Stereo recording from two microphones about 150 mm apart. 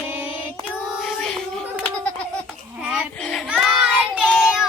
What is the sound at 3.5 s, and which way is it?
Child singing, 5° right (ahead or behind).